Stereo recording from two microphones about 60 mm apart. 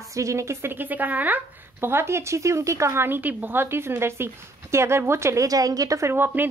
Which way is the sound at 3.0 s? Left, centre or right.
Right.